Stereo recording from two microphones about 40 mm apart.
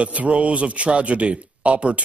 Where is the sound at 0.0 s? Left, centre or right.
Right.